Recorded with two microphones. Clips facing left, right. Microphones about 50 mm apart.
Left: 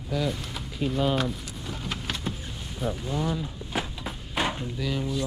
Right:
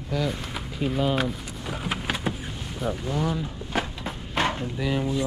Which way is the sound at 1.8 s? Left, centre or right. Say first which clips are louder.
Right 5 dB; centre.